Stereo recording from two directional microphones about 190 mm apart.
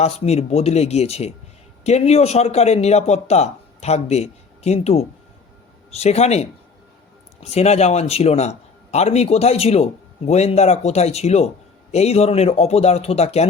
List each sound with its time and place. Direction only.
0.0 s a man's voice: 35° left (ahead or behind)